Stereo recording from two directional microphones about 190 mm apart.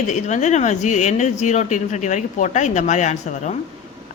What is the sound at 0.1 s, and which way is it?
Speech, 40° left (ahead or behind).